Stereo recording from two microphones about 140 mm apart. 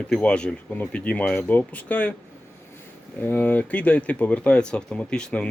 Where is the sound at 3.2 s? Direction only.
10° left (ahead or behind).